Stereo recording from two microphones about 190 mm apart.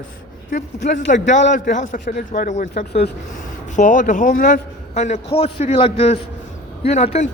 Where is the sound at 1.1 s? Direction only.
40° left (ahead or behind).